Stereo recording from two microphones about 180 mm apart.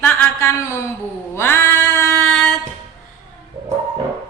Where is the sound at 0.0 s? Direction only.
10° left (ahead or behind).